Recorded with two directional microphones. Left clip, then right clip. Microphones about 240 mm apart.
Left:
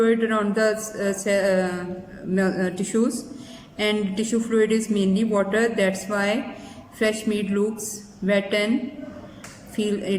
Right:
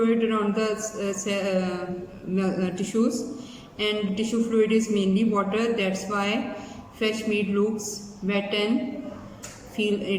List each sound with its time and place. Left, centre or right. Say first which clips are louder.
0.0 s speech: left 3 dB; left
9.7 s speech: left 1 dB; left